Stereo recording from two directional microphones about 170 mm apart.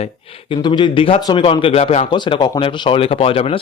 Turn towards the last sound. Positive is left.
turn(degrees=35)  # may be behind; listen again after turning